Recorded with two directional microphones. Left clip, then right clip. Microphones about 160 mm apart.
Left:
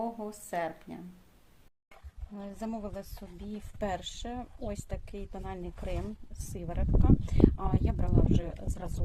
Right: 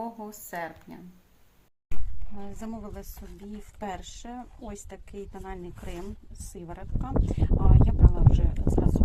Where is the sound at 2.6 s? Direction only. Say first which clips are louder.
Left 3 dB; 10° left (ahead or behind).